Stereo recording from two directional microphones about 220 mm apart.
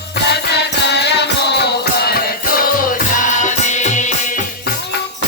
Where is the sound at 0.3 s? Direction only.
50° left (ahead or behind); by 4.1 s 35° left (ahead or behind).